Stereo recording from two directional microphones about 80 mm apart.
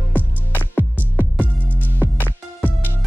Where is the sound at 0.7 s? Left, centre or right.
Left.